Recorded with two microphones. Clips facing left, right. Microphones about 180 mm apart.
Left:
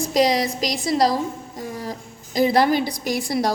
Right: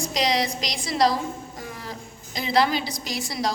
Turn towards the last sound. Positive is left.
turn(degrees=55)  # may be behind; listen again after turning